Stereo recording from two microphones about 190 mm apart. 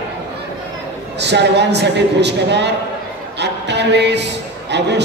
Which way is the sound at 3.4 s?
65° right (ahead or behind).